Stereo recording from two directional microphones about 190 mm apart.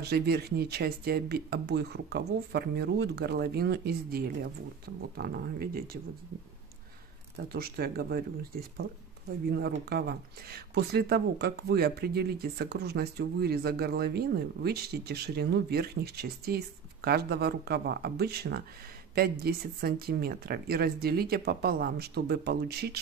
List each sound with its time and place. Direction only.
0.0 s speech: 55° right (ahead or behind)
7.4 s speech: 55° right (ahead or behind)